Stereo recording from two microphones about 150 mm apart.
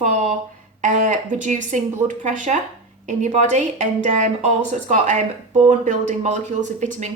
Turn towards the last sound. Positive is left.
turn(degrees=-55)  # may be behind; listen again after turning